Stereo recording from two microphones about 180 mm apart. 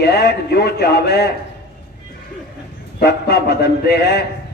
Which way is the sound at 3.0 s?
65° left (ahead or behind).